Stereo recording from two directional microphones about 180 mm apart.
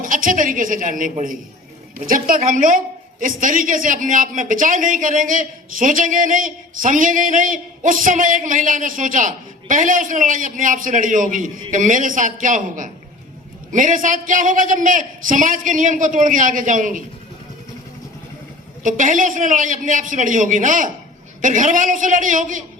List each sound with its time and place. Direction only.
0.0 s a woman's voice: 50° right (ahead or behind)
18.8 s a woman's voice: 45° right (ahead or behind)